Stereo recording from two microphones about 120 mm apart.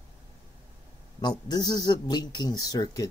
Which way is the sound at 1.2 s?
35° left (ahead or behind).